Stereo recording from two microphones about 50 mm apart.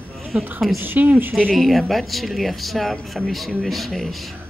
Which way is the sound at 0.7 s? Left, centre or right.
Right.